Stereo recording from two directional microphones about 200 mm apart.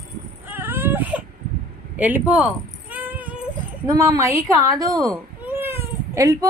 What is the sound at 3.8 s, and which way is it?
A woman's voice, 15° right (ahead or behind).